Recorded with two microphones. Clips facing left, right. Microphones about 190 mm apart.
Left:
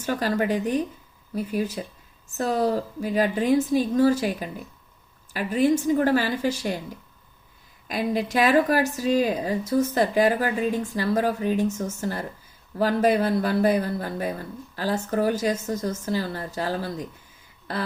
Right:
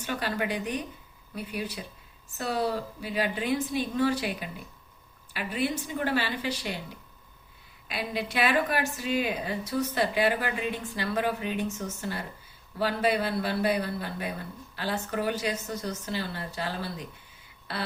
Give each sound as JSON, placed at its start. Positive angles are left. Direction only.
{"t": 0.0, "sound": "a woman's voice", "side_deg": 40}
{"t": 7.9, "sound": "a woman's voice", "side_deg": 45}